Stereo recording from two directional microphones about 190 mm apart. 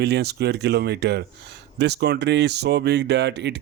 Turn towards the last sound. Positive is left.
turn(degrees=-65)  # may be behind; listen again after turning